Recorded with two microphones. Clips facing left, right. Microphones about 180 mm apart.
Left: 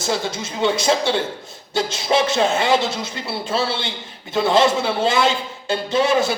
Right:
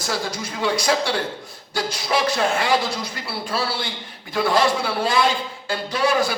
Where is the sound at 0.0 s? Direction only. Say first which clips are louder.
Left 3 dB; 25° left (ahead or behind).